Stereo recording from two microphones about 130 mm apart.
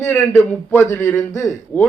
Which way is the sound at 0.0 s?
15° left (ahead or behind).